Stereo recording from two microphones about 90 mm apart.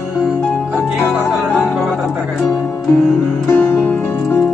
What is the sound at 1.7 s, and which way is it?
Music, centre (ahead or behind).